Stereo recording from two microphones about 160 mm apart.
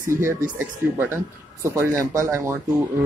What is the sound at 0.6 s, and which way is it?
Speech, 15° right (ahead or behind).